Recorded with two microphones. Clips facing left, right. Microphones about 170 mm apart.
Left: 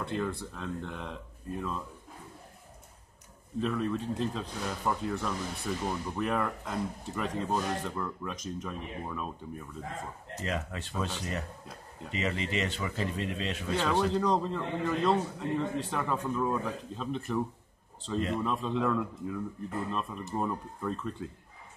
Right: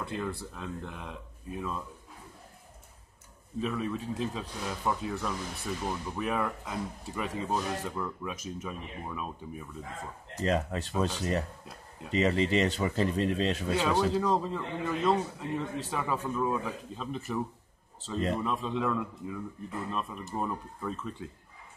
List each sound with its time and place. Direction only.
0.0 s speech: centre (ahead or behind)
3.6 s speech: 5° right (ahead or behind)
10.4 s speech: 35° right (ahead or behind)
13.7 s speech: 5° right (ahead or behind)